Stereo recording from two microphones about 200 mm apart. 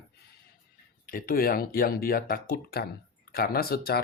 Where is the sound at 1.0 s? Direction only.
45° left (ahead or behind).